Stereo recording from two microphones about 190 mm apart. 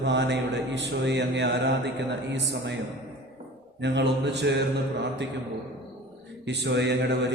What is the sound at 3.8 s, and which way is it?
A man's voice, 65° right (ahead or behind).